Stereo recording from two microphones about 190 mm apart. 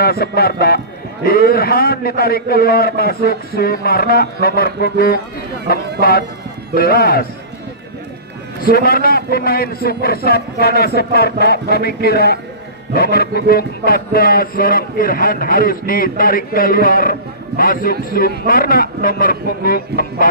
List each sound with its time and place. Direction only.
0.0 s speech: 55° left (ahead or behind)
8.6 s speech: 50° left (ahead or behind)